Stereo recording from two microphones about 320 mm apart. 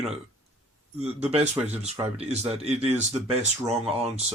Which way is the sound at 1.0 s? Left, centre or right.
Centre.